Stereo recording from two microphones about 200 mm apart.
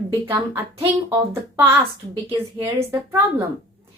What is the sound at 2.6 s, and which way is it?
Speech, 10° right (ahead or behind).